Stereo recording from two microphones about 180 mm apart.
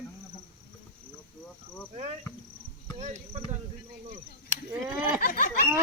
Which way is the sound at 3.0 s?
35° right (ahead or behind).